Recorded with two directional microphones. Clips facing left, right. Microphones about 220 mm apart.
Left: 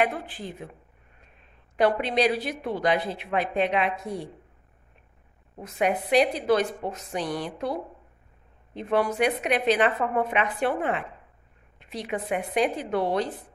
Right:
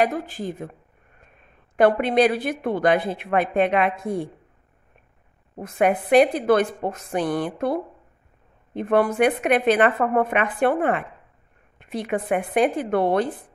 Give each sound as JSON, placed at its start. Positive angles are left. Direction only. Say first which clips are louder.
{"t": 0.0, "sound": "speech", "louder": "right 4 dB", "side_deg": -40}
{"t": 5.6, "sound": "a woman's voice", "louder": "right 5 dB", "side_deg": -55}